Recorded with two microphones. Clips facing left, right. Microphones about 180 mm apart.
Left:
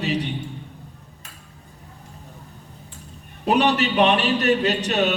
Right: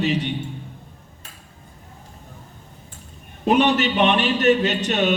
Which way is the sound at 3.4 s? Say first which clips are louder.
Right 2 dB; 35° left (ahead or behind).